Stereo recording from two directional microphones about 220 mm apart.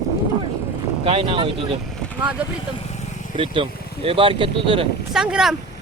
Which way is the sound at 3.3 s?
25° right (ahead or behind).